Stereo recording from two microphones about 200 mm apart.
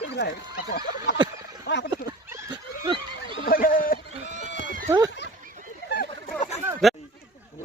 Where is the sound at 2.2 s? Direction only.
10° right (ahead or behind).